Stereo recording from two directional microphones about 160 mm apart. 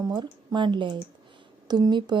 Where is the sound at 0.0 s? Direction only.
25° right (ahead or behind).